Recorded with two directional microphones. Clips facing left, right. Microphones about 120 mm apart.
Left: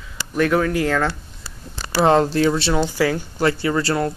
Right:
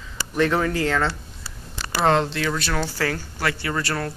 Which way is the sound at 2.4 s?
25° left (ahead or behind).